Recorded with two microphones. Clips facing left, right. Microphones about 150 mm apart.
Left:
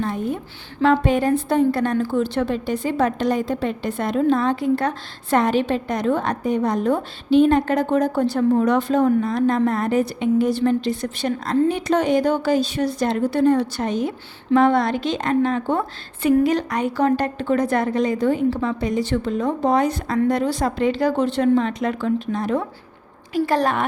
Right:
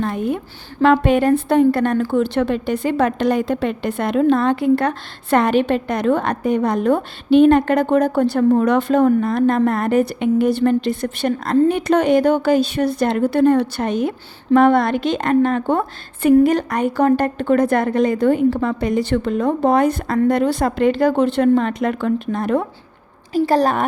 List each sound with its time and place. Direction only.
0.0 s a woman's voice: 75° right (ahead or behind); by 22.6 s 55° right (ahead or behind)
23.3 s a woman's voice: 35° right (ahead or behind)